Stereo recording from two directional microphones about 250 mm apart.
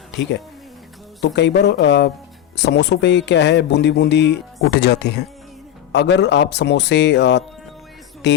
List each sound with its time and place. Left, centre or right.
0.1 s speech: left